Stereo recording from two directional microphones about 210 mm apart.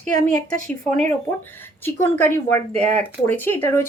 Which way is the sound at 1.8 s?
10° left (ahead or behind).